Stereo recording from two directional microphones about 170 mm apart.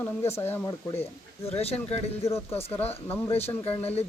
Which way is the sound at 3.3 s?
35° left (ahead or behind).